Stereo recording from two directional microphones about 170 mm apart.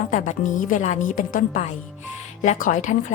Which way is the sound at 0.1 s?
50° left (ahead or behind).